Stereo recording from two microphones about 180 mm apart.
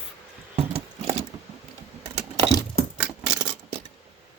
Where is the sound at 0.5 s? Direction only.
35° right (ahead or behind).